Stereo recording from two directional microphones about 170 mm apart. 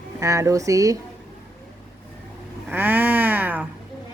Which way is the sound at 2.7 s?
10° right (ahead or behind).